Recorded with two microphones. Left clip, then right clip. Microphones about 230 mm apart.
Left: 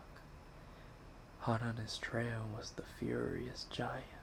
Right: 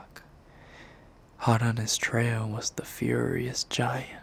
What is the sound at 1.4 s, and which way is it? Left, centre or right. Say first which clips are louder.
Speech: right 12 dB; right.